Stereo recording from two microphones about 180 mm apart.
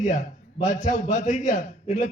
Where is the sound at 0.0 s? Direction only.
40° left (ahead or behind).